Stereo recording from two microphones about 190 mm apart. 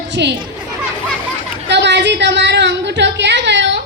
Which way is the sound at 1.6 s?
65° right (ahead or behind).